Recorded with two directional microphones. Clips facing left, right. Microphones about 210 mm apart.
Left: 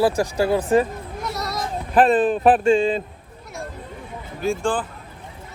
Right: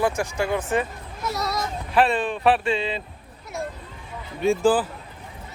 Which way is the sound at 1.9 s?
45° left (ahead or behind).